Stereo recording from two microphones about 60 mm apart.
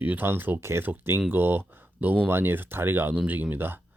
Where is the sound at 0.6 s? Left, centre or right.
Right.